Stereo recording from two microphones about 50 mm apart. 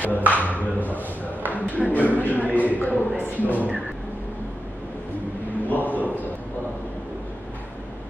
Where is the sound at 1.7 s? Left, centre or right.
Right.